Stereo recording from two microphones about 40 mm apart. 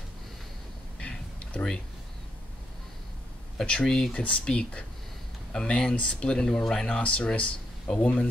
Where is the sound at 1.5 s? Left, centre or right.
Left.